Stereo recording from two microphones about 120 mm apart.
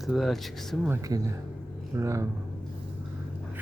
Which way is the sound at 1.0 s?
30° right (ahead or behind).